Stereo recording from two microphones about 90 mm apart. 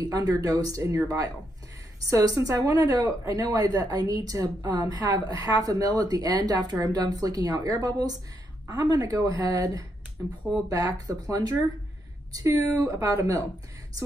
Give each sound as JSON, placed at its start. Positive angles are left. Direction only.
{"t": 0.0, "sound": "a woman's voice", "side_deg": -45}